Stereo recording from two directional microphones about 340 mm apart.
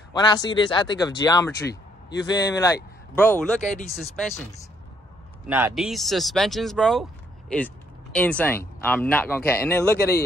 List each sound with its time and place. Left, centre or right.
0.1 s speech: centre
9.9 s speech: left